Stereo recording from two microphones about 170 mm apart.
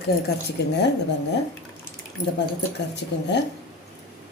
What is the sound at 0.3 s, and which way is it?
Speech, 70° left (ahead or behind).